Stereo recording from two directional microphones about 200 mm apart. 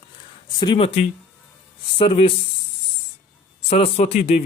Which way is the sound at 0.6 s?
25° left (ahead or behind).